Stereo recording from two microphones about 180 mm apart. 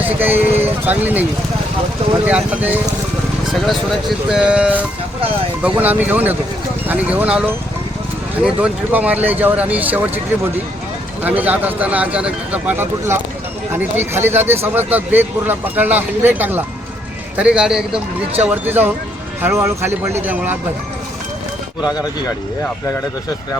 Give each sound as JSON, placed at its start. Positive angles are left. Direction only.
{"t": 0.0, "sound": "speech", "side_deg": -10}
{"t": 4.3, "sound": "a man's voice", "side_deg": -5}
{"t": 8.6, "sound": "speech", "side_deg": -10}
{"t": 11.2, "sound": "a man's voice", "side_deg": -10}
{"t": 21.8, "sound": "speech", "side_deg": 20}